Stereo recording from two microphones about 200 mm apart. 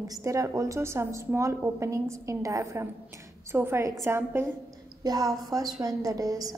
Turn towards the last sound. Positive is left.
turn(degrees=-20)  # may be behind; listen again after turning